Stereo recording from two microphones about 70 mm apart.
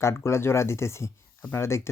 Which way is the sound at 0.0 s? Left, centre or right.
Left.